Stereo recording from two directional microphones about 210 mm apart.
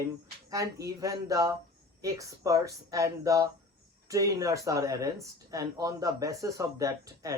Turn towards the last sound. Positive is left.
turn(degrees=-15)  # may be behind; listen again after turning